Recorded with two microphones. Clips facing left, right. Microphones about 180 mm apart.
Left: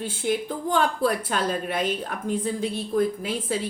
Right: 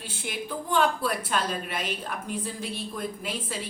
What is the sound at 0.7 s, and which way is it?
A woman's voice, 50° left (ahead or behind).